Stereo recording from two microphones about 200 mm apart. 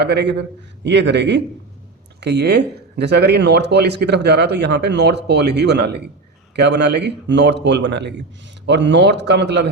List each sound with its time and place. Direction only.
0.0 s speech: 60° right (ahead or behind)